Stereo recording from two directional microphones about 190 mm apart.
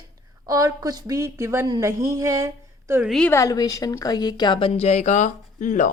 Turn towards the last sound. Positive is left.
turn(degrees=40)  # may be behind; listen again after turning